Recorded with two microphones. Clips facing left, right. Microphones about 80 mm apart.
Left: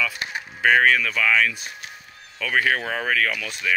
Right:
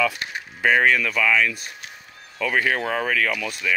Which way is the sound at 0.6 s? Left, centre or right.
Centre.